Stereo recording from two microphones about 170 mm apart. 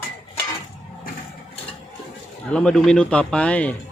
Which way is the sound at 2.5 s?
5° left (ahead or behind).